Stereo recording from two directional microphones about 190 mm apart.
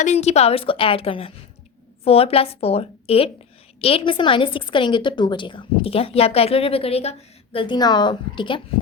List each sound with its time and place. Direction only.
0.0 s a woman's voice: 35° left (ahead or behind)